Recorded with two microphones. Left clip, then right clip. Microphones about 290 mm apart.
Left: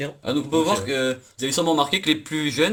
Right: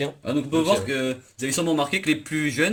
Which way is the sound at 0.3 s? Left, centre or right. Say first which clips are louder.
Left 1 dB; centre.